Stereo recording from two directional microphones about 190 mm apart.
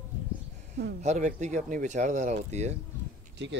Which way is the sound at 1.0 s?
40° right (ahead or behind).